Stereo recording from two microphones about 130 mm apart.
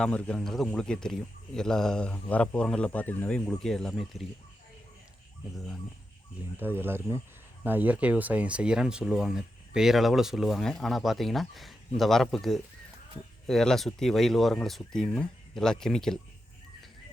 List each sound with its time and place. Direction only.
0.0 s speech: 5° left (ahead or behind)
6.6 s speech: 15° right (ahead or behind); by 16.1 s 5° left (ahead or behind)